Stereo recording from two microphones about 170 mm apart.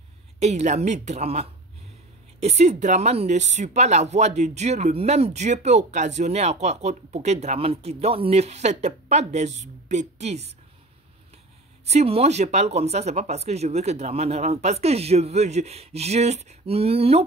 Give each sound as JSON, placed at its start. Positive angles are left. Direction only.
{"t": 0.4, "sound": "speech", "side_deg": -40}
{"t": 11.8, "sound": "speech", "side_deg": -40}